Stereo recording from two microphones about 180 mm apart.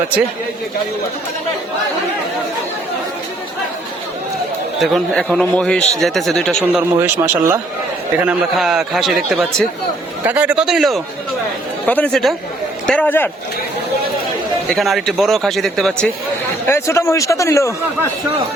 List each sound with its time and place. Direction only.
4.8 s a man's voice: centre (ahead or behind)
7.0 s a man's voice: 10° right (ahead or behind); by 13.3 s 10° left (ahead or behind)
14.8 s a man's voice: centre (ahead or behind)
16.6 s a man's voice: 15° left (ahead or behind)